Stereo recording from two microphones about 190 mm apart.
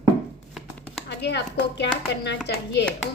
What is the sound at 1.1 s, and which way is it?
A woman's voice, 65° left (ahead or behind).